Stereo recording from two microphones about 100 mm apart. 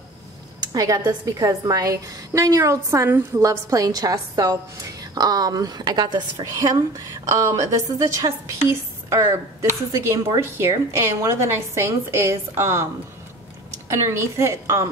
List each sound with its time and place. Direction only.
0.6 s a woman's voice: 40° right (ahead or behind)
3.3 s a woman's voice: 35° right (ahead or behind)
6.5 s a woman's voice: 35° right (ahead or behind)
13.8 s a woman's voice: 30° right (ahead or behind)